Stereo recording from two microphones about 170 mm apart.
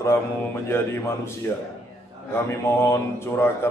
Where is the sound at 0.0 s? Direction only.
15° left (ahead or behind).